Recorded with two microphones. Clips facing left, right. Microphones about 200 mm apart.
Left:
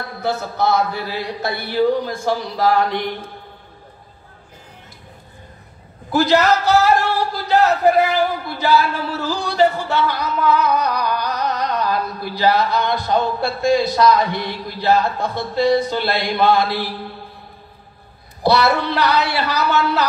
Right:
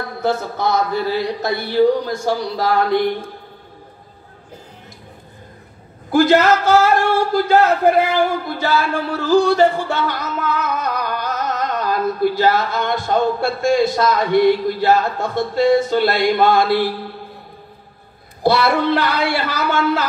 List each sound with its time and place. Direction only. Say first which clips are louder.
0.2 s speech: right 1 dB; 50° right (ahead or behind)
6.1 s speech: right 2 dB; 50° right (ahead or behind)
18.4 s speech: right 1 dB; 50° right (ahead or behind)